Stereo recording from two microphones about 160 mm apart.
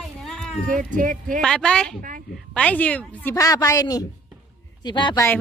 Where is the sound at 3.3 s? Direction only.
20° left (ahead or behind).